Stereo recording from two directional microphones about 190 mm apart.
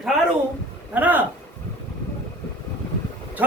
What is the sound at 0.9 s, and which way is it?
Speech, 10° right (ahead or behind).